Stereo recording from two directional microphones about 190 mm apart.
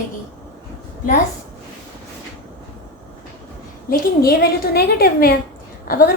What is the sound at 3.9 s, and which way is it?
A woman's voice, 55° left (ahead or behind).